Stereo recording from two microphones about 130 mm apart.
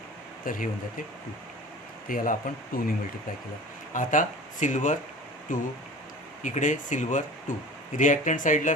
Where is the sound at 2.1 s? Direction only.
90° left.